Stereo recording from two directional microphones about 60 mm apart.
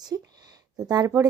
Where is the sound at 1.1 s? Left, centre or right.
Right.